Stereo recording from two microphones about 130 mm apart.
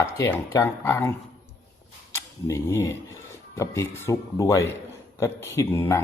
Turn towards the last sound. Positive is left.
turn(degrees=20)  # may be behind; listen again after turning